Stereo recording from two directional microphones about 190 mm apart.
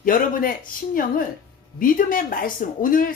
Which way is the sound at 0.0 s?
45° left (ahead or behind).